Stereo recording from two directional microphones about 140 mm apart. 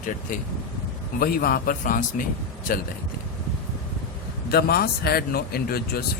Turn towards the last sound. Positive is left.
turn(degrees=90)